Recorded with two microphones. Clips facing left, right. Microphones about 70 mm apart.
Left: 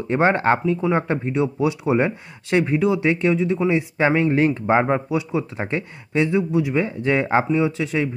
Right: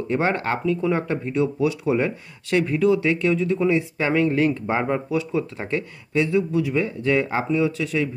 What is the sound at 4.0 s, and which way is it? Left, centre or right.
Speech, left.